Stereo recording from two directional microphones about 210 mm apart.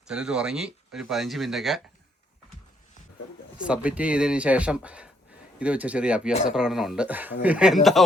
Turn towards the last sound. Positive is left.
turn(degrees=0)  # may be behind; listen again after turning